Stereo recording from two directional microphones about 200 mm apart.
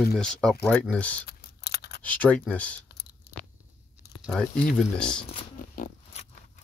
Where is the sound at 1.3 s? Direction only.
55° left (ahead or behind).